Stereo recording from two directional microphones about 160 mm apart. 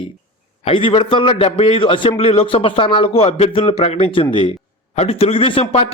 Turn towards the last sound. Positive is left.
turn(degrees=35)  # may be behind; listen again after turning